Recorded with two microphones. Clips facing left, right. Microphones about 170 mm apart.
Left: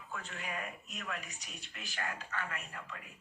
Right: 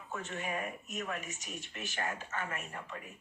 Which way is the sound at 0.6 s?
45° right (ahead or behind).